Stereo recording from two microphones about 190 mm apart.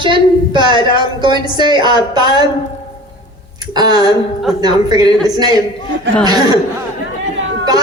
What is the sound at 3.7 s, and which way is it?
A man's voice, 20° right (ahead or behind).